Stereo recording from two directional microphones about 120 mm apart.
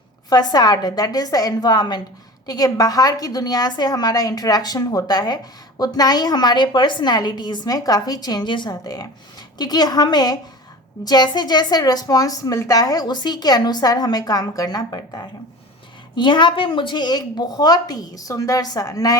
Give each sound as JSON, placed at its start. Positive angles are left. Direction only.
{"t": 0.3, "sound": "a woman's voice", "side_deg": 35}